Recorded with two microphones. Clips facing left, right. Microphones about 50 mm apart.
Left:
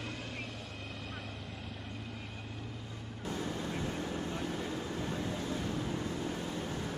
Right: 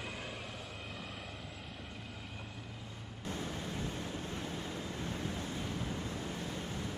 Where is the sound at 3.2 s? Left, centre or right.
Left.